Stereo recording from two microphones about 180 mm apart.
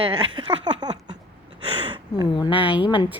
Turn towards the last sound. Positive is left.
turn(degrees=30)  # may be behind; listen again after turning